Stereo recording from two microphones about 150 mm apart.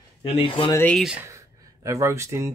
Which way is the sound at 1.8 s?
20° right (ahead or behind).